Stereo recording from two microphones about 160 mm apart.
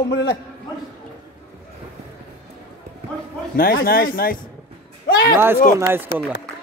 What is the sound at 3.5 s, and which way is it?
Speech, 65° left (ahead or behind).